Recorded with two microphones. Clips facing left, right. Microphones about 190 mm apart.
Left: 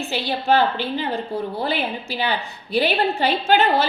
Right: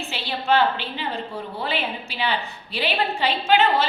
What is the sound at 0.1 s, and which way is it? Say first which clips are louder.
A woman's voice: left 2 dB; 45° left (ahead or behind).